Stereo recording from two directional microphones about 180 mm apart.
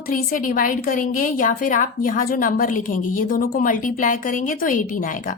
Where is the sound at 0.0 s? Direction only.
50° left (ahead or behind).